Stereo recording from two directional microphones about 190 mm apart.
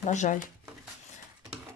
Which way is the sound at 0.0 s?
40° left (ahead or behind).